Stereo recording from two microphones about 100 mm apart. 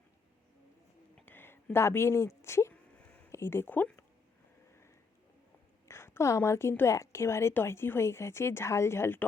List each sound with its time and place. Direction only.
1.2 s a sound: 20° left (ahead or behind)
1.7 s speech: 25° left (ahead or behind)
5.9 s a woman's voice: 25° left (ahead or behind)